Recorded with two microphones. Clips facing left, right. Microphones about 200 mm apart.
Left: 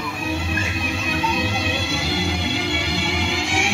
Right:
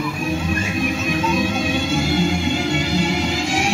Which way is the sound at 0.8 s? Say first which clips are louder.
Right 5 dB; 45° right (ahead or behind).